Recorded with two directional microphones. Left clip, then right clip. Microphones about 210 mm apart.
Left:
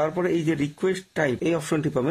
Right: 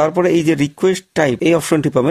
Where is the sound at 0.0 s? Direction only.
45° right (ahead or behind).